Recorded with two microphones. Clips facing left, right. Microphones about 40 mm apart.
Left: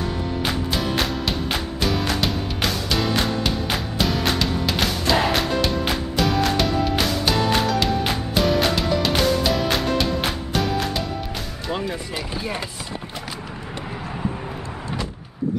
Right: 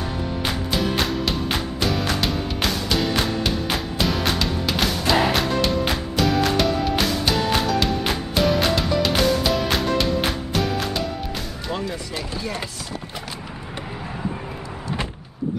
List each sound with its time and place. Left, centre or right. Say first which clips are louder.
0.5 s music: right 1 dB; centre
11.7 s speech: left 1 dB; centre